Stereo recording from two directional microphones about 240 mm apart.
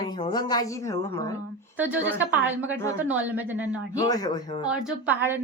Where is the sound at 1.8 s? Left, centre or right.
Centre.